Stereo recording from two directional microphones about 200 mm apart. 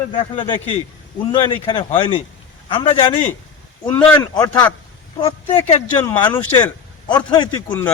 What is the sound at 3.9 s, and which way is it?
Speech, 10° left (ahead or behind).